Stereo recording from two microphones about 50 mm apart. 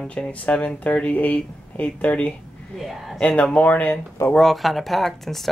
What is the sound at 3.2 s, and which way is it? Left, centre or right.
Speech, left.